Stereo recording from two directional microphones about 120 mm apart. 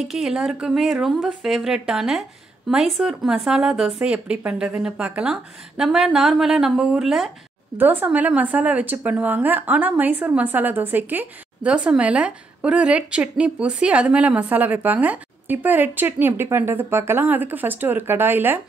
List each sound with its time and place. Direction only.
0.0 s speech: 5° right (ahead or behind)
7.7 s a woman's voice: 15° right (ahead or behind)